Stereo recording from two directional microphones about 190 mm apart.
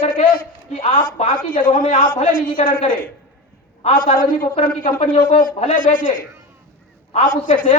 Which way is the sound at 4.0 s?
45° left (ahead or behind).